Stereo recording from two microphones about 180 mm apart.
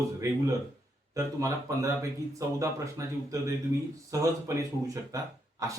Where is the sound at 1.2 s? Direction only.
15° right (ahead or behind).